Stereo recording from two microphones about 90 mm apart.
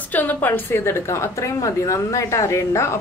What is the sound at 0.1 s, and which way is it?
A woman's voice, 20° left (ahead or behind).